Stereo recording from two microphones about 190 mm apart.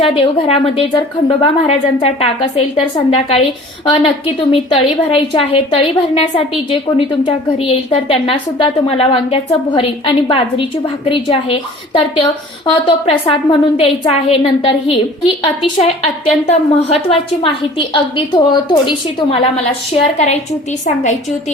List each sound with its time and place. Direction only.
0.0 s a woman's voice: 30° left (ahead or behind)